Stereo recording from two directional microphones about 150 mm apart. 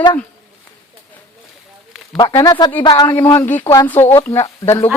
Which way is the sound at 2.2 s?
25° left (ahead or behind).